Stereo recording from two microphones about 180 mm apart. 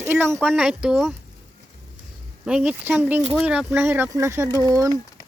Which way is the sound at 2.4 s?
5° right (ahead or behind).